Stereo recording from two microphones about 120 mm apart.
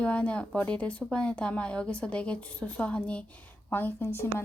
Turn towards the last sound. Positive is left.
turn(degrees=20)  # may be behind; listen again after turning